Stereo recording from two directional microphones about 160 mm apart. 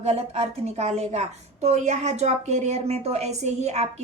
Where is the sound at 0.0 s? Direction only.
40° right (ahead or behind).